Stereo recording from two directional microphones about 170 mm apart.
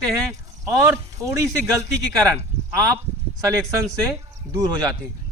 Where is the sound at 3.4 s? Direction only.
15° right (ahead or behind).